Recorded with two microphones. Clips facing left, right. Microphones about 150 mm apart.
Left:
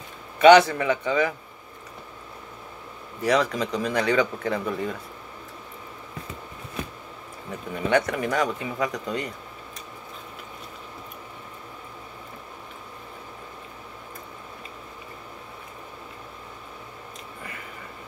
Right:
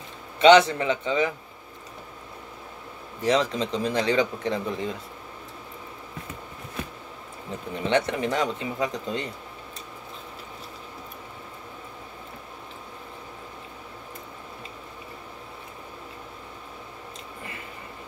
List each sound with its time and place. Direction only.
0.4 s speech: 25° right (ahead or behind)
3.3 s speech: 25° right (ahead or behind)
7.7 s speech: 25° right (ahead or behind)